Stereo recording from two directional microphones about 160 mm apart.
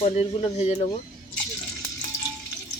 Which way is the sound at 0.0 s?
40° left (ahead or behind).